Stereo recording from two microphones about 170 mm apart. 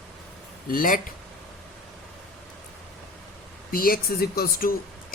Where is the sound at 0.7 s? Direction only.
55° left (ahead or behind).